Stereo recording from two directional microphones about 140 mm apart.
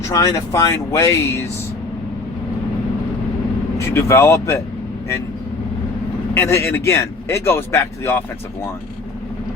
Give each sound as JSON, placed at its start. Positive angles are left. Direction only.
{"t": 0.1, "sound": "speech", "side_deg": 25}
{"t": 3.8, "sound": "speech", "side_deg": 20}
{"t": 6.3, "sound": "speech", "side_deg": 20}